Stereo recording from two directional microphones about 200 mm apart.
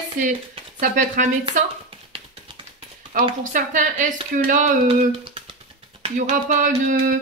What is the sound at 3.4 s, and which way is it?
Speech, 40° right (ahead or behind).